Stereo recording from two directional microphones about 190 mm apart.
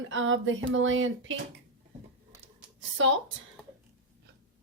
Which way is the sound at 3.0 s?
90° right.